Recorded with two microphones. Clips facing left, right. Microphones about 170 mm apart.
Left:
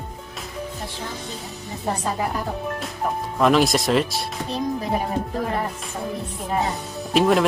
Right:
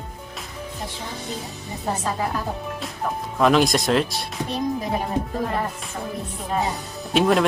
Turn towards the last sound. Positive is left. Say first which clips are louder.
# left 1 dB
turn(degrees=0)  # may be behind; listen again after turning